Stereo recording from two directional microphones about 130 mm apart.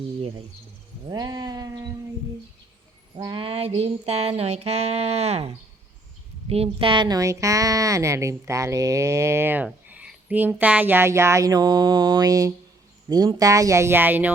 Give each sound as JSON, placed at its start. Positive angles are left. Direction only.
{"t": 1.0, "sound": "speech", "side_deg": -30}
{"t": 3.2, "sound": "a sound", "side_deg": -35}
{"t": 6.5, "sound": "speech", "side_deg": -45}